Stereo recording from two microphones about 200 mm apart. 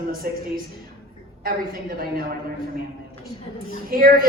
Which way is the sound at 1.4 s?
50° right (ahead or behind).